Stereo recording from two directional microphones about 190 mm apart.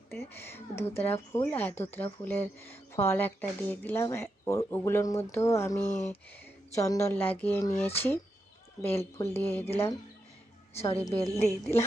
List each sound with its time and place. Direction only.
0.1 s speech: 10° left (ahead or behind)
10.8 s a woman's voice: 30° left (ahead or behind)